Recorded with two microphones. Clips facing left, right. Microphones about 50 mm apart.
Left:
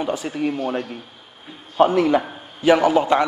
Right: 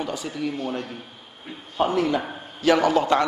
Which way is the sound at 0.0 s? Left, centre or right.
Left.